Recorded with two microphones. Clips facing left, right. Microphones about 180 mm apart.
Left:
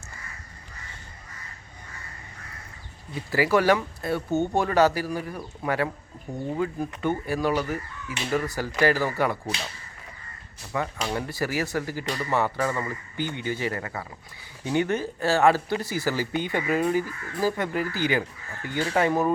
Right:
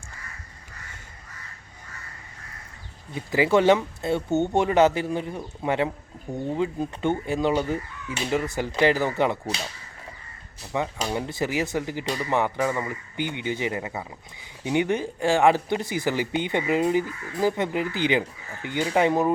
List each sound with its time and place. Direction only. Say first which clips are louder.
3.3 s speech: right 2 dB; 25° right (ahead or behind)
10.7 s speech: right 1 dB; 20° right (ahead or behind)